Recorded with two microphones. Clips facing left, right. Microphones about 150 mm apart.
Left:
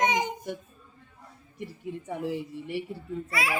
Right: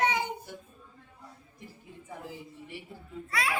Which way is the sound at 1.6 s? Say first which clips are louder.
Left 13 dB; 70° left (ahead or behind).